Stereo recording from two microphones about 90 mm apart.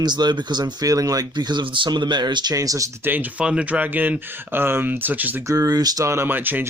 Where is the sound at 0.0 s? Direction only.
55° right (ahead or behind).